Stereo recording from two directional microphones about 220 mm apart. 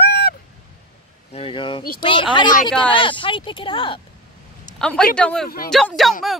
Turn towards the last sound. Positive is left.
turn(degrees=0)  # may be behind; listen again after turning